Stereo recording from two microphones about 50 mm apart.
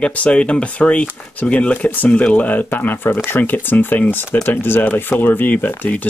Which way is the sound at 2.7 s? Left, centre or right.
Left.